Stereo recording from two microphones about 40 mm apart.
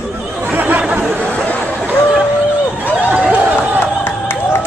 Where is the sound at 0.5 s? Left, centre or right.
Right.